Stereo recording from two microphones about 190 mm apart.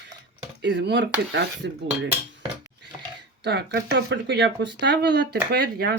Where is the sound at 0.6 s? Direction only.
65° right (ahead or behind).